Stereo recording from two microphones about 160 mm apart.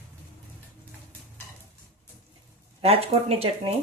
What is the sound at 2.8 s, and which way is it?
Speech, 40° right (ahead or behind).